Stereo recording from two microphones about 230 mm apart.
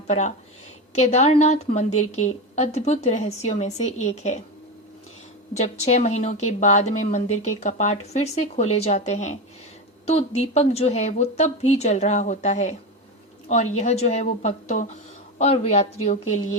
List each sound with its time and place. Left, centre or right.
0.1 s a woman's voice: left
5.5 s a woman's voice: left